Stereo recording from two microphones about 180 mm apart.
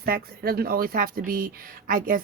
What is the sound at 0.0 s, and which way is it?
Speech, 55° right (ahead or behind).